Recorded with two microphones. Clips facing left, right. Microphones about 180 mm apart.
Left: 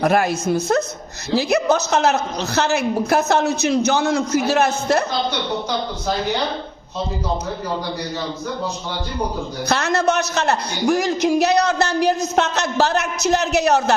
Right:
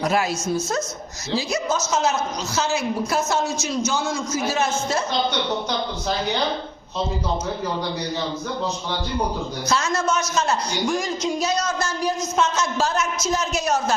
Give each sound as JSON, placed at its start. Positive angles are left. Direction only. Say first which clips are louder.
{"t": 0.0, "sound": "a woman's voice", "louder": "left 5 dB", "side_deg": 55}
{"t": 9.6, "sound": "a man's voice", "louder": "left 4 dB", "side_deg": 65}